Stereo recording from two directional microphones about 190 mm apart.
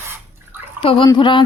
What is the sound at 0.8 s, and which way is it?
Speech, 30° left (ahead or behind).